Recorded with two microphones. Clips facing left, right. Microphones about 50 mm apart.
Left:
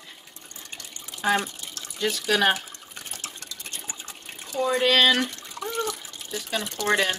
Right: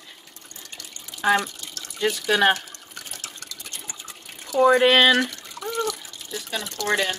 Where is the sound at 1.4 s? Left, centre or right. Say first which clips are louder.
Right 2 dB; left.